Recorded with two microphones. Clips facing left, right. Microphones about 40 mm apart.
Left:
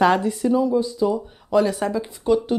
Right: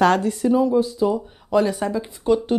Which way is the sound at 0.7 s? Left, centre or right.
Centre.